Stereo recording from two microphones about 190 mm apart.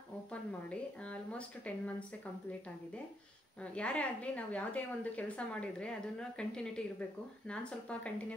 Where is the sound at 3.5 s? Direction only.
5° left (ahead or behind).